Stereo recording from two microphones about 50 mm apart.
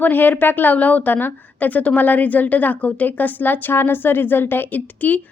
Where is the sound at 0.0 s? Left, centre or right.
Left.